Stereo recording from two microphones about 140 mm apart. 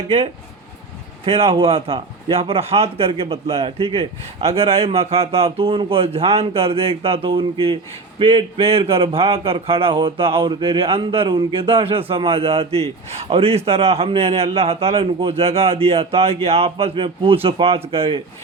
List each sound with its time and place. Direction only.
1.2 s a man's voice: 45° right (ahead or behind)